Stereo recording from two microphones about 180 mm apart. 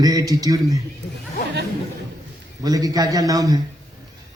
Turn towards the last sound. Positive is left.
turn(degrees=-20)  # may be behind; listen again after turning